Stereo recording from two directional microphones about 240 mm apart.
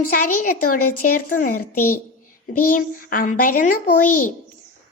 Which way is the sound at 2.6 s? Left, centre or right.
Left.